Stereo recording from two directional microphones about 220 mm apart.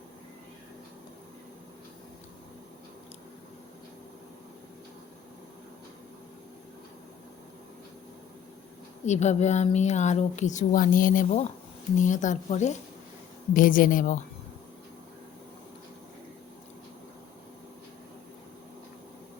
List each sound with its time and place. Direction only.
9.0 s a woman's voice: 30° left (ahead or behind)